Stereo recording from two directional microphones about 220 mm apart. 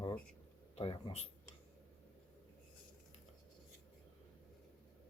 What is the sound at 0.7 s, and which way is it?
Speech, 25° left (ahead or behind).